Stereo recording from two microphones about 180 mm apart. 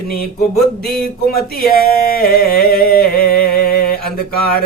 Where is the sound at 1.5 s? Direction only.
55° left (ahead or behind).